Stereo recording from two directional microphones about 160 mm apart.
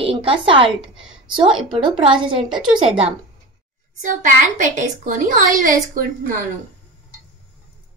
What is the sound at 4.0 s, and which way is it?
A woman's voice, 55° right (ahead or behind).